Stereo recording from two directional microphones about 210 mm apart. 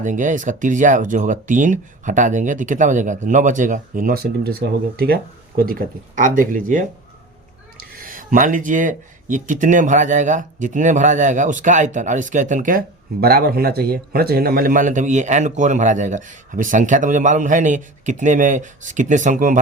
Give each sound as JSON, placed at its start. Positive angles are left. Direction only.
{"t": 0.0, "sound": "speech", "side_deg": -35}